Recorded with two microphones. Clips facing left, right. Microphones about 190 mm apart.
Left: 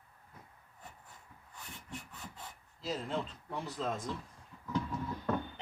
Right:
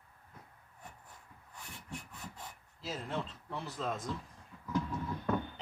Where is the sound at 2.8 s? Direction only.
5° right (ahead or behind).